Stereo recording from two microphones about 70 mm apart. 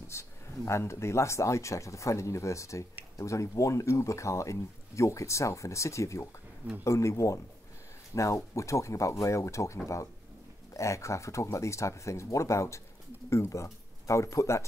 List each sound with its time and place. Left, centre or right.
0.1 s speech: left